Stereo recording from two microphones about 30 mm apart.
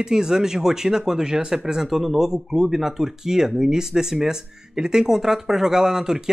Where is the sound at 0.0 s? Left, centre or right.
Right.